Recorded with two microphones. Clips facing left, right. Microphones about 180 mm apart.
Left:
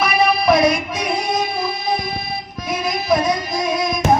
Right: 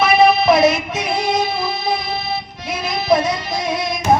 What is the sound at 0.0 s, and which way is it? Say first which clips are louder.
Child singing: right 4 dB; 25° right (ahead or behind).